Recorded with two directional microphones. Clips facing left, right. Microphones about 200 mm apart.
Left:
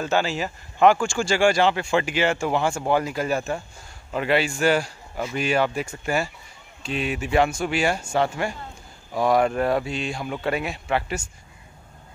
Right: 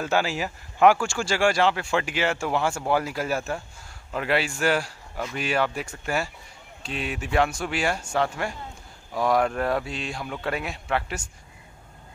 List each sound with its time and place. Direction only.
0.0 s speech: 10° right (ahead or behind)